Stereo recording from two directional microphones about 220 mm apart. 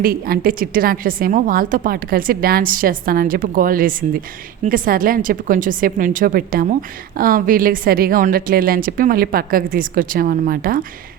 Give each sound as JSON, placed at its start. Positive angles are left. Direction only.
{"t": 0.0, "sound": "a woman's voice", "side_deg": -40}